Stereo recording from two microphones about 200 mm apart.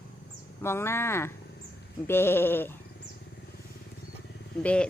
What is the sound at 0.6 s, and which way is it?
Livestock, 10° left (ahead or behind).